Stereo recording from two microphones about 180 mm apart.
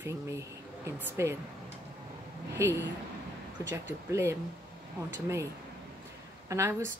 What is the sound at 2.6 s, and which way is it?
Speech, 10° right (ahead or behind).